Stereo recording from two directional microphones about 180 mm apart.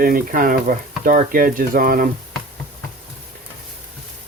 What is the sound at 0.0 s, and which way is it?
Speech, 50° right (ahead or behind).